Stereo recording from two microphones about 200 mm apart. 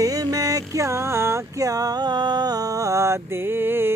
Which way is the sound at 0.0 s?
15° right (ahead or behind).